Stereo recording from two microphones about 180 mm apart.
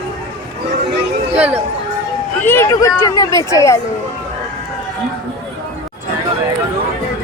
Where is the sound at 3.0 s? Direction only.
20° left (ahead or behind).